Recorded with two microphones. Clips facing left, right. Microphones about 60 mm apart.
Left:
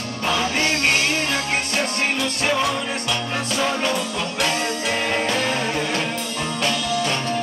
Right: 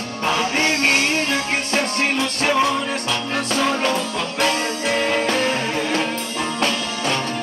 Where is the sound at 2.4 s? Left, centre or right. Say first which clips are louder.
Right 3 dB; right.